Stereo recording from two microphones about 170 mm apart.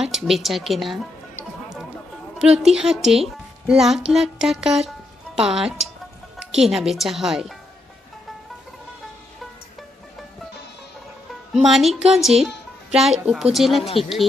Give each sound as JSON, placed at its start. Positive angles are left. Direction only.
{"t": 0.0, "sound": "a woman's voice", "side_deg": 0}
{"t": 2.3, "sound": "a woman's voice", "side_deg": -5}
{"t": 11.5, "sound": "a woman's voice", "side_deg": 0}